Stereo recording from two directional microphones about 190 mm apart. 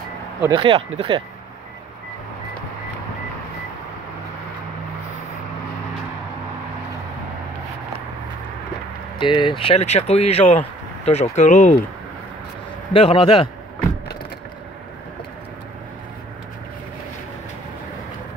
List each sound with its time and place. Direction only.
0.4 s speech: 20° right (ahead or behind)
9.2 s speech: 25° left (ahead or behind); by 11.8 s 40° left (ahead or behind)
12.9 s a man's voice: 30° left (ahead or behind)